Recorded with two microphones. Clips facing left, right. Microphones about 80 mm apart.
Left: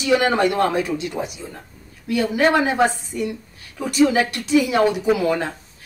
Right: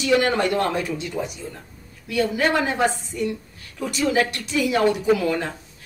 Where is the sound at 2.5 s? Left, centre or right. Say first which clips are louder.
Left 3 dB; centre.